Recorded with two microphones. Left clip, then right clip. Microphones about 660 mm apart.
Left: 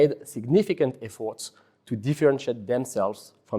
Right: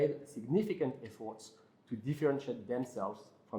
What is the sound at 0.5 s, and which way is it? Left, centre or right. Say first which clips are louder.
Speech: left 12 dB; left.